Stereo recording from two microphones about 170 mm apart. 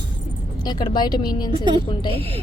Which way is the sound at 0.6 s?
25° left (ahead or behind).